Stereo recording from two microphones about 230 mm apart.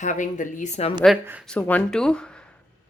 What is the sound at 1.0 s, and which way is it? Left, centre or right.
Speech, centre.